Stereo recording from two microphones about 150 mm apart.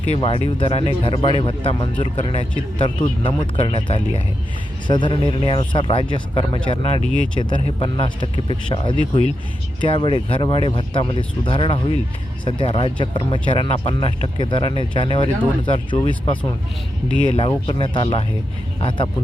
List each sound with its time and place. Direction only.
0.1 s speech: 40° left (ahead or behind)
17.7 s speech: 35° left (ahead or behind)